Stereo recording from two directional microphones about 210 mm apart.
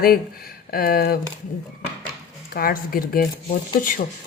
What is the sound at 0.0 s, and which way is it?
Speech, 45° left (ahead or behind).